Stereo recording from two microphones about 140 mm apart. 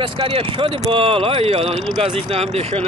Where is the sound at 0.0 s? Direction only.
40° right (ahead or behind).